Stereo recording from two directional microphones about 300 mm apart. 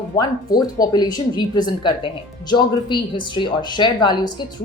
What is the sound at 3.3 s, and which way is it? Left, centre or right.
Speech, centre.